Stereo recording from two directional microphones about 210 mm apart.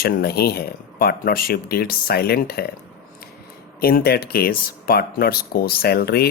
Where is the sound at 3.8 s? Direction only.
45° left (ahead or behind).